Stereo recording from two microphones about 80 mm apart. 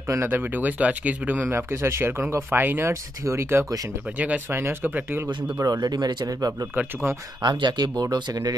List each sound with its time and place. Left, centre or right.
0.1 s speech: right
5.6 s speech: right
6.7 s speech: right
7.4 s speech: right